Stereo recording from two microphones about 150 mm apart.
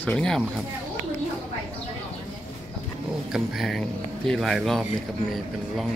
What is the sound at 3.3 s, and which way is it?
Speech, centre (ahead or behind).